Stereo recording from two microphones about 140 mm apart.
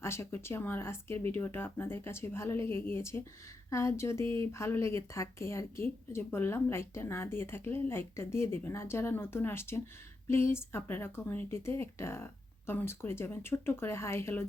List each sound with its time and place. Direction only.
0.0 s speech: 20° left (ahead or behind)